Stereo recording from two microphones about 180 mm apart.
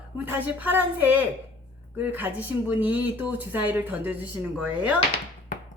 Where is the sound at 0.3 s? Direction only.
10° right (ahead or behind).